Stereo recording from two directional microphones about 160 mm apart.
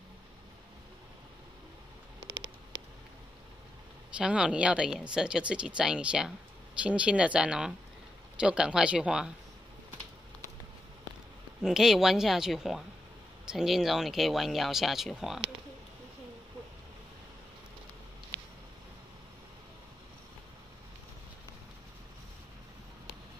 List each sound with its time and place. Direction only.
4.2 s speech: 5° right (ahead or behind)
11.6 s speech: 5° right (ahead or behind)